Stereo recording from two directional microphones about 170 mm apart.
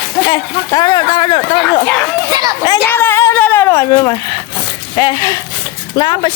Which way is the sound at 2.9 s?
15° left (ahead or behind).